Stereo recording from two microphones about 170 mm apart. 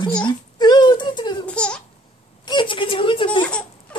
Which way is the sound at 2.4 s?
30° left (ahead or behind).